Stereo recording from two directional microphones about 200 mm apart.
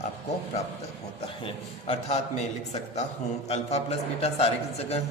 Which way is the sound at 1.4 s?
30° left (ahead or behind).